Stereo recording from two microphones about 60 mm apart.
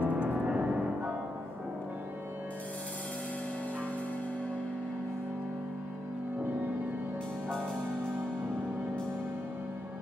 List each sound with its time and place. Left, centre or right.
0.0 s music: centre